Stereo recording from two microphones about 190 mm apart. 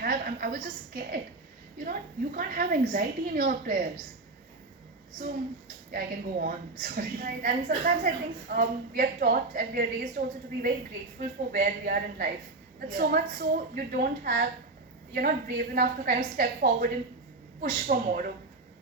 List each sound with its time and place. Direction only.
0.0 s a sound: 50° right (ahead or behind)
1.8 s a woman's voice: 50° right (ahead or behind)
5.9 s a woman's voice: 50° right (ahead or behind)